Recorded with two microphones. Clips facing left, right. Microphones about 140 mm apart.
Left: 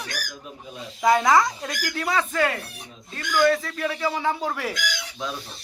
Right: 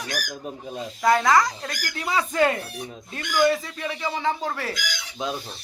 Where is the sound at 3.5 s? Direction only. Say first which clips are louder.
Left 2 dB; centre (ahead or behind).